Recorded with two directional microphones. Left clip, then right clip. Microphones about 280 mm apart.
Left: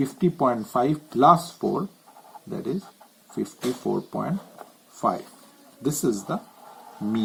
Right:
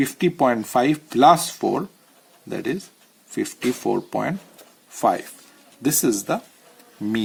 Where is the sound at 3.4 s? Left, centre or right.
Right.